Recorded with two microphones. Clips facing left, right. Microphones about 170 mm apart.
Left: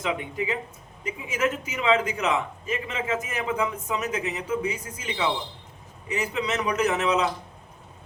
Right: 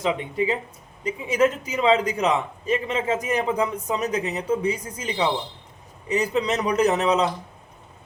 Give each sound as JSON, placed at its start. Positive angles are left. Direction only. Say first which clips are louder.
{"t": 0.0, "sound": "a man's voice", "louder": "right 5 dB", "side_deg": -30}